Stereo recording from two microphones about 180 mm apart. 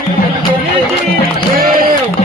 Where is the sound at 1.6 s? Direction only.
50° right (ahead or behind).